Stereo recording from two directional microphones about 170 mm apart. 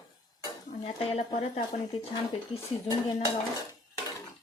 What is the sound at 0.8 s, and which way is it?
Speech, 45° left (ahead or behind).